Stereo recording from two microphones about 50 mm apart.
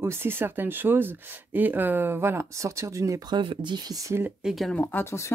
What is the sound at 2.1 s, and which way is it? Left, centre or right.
Speech, right.